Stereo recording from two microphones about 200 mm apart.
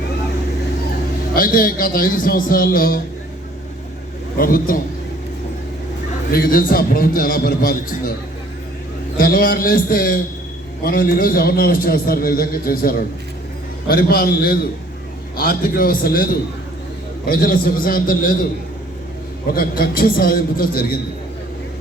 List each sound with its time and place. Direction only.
1.3 s a man's voice: 45° left (ahead or behind)
4.4 s a man's voice: 45° left (ahead or behind)
6.3 s a man's voice: 45° left (ahead or behind)
9.1 s a man's voice: 45° left (ahead or behind)
19.5 s a man's voice: 50° left (ahead or behind)